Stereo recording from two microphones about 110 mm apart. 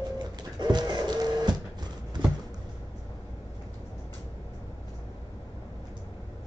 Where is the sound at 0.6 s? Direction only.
40° right (ahead or behind).